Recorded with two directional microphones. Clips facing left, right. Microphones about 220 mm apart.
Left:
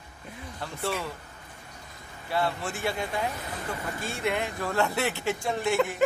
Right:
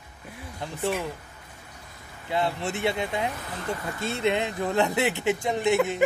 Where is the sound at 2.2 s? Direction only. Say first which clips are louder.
Right 2 dB; 20° right (ahead or behind).